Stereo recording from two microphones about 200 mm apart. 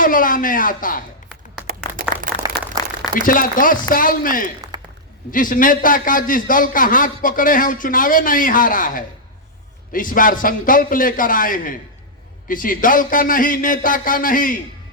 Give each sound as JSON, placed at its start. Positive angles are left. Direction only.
{"t": 0.0, "sound": "a man's voice", "side_deg": 45}
{"t": 2.5, "sound": "a sound", "side_deg": -55}
{"t": 3.2, "sound": "a man's voice", "side_deg": 40}